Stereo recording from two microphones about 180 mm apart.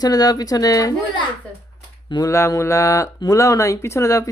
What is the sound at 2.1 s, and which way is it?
Speech, 20° left (ahead or behind).